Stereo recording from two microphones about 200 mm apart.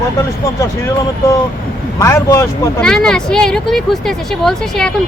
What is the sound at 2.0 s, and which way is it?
Speech, 15° left (ahead or behind).